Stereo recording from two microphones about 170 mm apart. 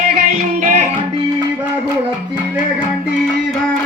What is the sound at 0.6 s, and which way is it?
Music, 45° right (ahead or behind).